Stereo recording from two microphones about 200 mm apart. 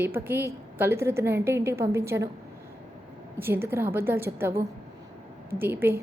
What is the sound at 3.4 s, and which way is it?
A woman's voice, 10° right (ahead or behind).